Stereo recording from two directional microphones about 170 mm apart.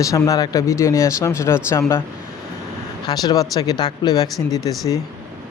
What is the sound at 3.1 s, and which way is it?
Speech, 25° left (ahead or behind).